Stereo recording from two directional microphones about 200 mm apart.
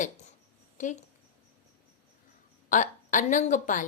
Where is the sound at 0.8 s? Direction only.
40° left (ahead or behind).